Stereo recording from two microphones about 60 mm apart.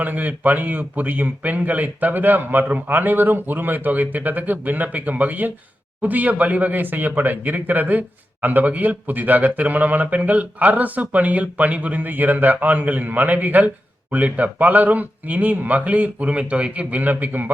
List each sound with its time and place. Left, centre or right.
0.0 s speech: right